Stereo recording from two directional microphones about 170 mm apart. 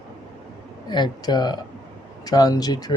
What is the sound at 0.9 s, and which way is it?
Speech, 25° left (ahead or behind).